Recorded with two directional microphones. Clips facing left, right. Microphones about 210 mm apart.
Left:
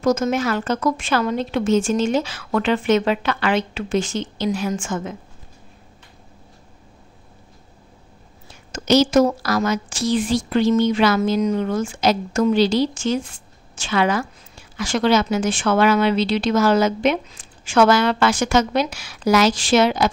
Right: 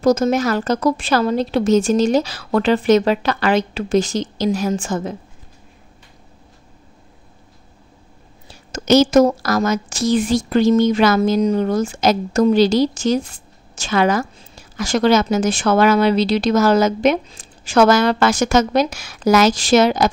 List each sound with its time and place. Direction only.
0.0 s speech: 35° right (ahead or behind)
8.8 s speech: 50° right (ahead or behind)